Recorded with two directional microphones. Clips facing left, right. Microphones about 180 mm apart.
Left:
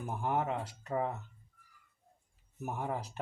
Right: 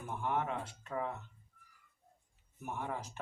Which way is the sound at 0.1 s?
35° left (ahead or behind).